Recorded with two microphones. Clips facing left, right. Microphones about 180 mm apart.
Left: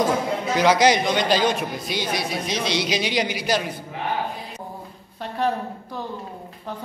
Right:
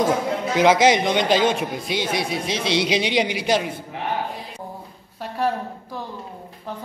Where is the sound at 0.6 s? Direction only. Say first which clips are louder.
Right 2 dB; 25° right (ahead or behind).